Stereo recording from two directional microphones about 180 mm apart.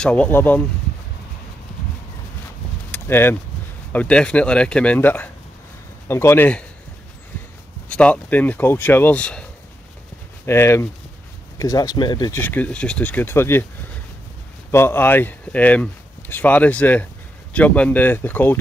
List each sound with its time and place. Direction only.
0.0 s speech: 5° left (ahead or behind)
2.9 s a sound: 10° left (ahead or behind)
3.9 s speech: 5° left (ahead or behind)
7.9 s speech: 5° left (ahead or behind)
10.4 s speech: 15° left (ahead or behind)
12.4 s speech: 10° left (ahead or behind)
14.7 s speech: 15° left (ahead or behind)